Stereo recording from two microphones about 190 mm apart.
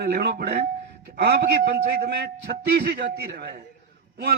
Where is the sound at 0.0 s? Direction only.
55° right (ahead or behind).